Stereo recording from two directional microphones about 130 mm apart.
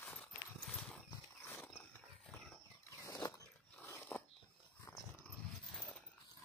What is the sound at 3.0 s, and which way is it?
Dog, 25° left (ahead or behind).